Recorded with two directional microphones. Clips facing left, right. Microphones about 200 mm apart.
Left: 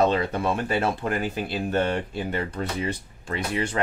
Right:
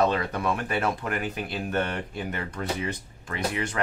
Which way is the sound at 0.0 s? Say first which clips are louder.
Left 2 dB; 25° left (ahead or behind).